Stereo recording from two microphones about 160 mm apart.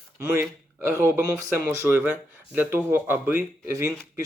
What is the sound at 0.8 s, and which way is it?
Speech, 15° right (ahead or behind).